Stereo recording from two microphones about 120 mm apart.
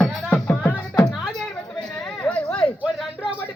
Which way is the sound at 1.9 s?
5° left (ahead or behind).